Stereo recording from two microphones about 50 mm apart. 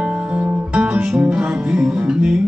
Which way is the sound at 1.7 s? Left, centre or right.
Centre.